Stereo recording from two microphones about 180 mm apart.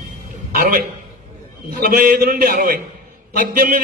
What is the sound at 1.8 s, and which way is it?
A man's voice, 55° right (ahead or behind).